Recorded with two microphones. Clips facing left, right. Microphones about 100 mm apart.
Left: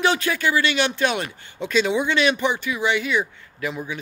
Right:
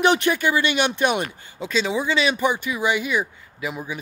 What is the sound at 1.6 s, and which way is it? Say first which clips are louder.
Speech: left 2 dB; centre (ahead or behind).